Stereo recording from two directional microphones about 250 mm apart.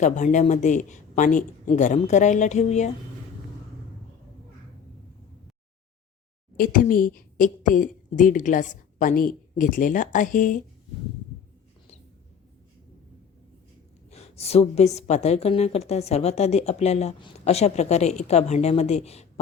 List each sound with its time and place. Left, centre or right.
0.0 s a woman's voice: left
6.6 s a woman's voice: left
14.1 s a woman's voice: left